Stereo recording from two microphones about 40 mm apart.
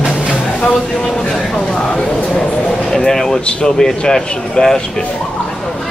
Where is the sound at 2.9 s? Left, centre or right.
Centre.